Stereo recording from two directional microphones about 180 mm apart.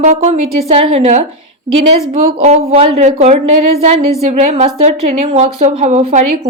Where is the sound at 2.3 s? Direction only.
35° right (ahead or behind).